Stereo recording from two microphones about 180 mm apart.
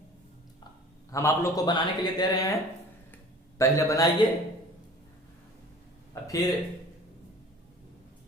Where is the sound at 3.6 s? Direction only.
15° left (ahead or behind).